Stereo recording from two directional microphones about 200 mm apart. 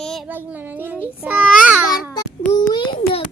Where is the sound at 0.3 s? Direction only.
10° right (ahead or behind).